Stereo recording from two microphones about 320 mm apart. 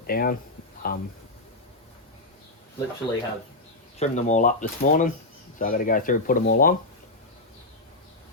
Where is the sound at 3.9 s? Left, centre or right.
Left.